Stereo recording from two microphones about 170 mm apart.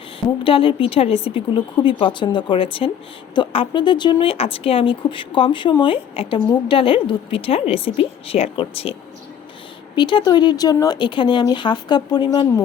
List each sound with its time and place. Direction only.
0.4 s speech: 30° left (ahead or behind)